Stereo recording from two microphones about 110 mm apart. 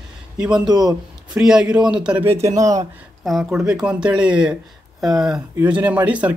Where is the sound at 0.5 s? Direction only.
40° right (ahead or behind).